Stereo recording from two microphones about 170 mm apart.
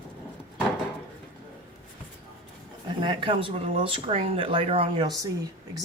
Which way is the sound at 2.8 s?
30° right (ahead or behind).